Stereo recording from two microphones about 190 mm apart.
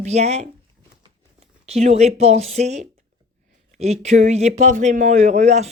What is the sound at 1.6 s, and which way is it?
Speech, 35° right (ahead or behind).